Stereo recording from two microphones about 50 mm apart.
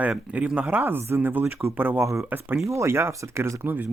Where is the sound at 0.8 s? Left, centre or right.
Right.